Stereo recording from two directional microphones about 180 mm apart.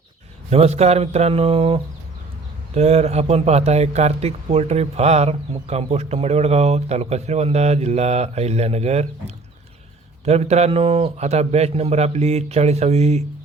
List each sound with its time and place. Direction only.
0.5 s speech: 35° right (ahead or behind)